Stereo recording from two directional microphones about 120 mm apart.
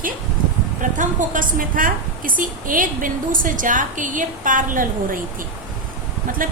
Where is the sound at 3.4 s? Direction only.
90° right.